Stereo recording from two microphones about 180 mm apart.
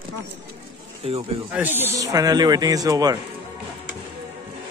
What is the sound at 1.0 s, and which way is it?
Speech, 30° right (ahead or behind).